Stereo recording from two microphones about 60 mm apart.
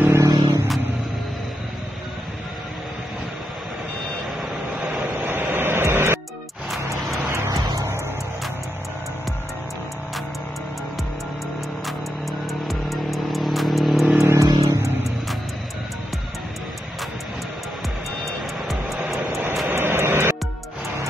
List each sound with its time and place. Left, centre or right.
0.1 s a sound: right
5.1 s vehicle: right
6.8 s music: right
12.6 s vehicle: centre
14.2 s vehicle: right
18.2 s music: centre
19.7 s vehicle: right